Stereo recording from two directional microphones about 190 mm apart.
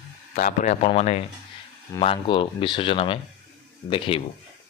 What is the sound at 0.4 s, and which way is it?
Speech, 40° left (ahead or behind).